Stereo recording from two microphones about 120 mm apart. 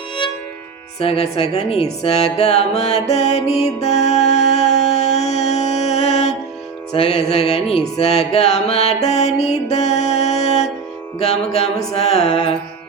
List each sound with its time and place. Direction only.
0.9 s speech: 55° left (ahead or behind)
3.8 s music: 70° left (ahead or behind)
6.9 s speech: 60° left (ahead or behind)
7.9 s music: 65° left (ahead or behind)
11.2 s speech: 60° left (ahead or behind)